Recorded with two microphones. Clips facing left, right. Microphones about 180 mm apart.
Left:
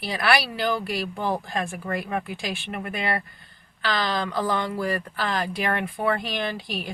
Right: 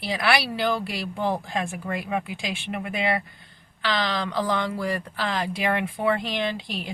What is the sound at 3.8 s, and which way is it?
Speech, 25° right (ahead or behind).